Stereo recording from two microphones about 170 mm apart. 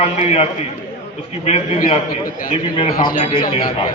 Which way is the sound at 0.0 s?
40° left (ahead or behind).